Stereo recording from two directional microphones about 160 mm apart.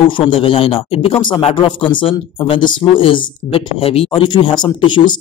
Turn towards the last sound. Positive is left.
turn(degrees=30)  # may be behind; listen again after turning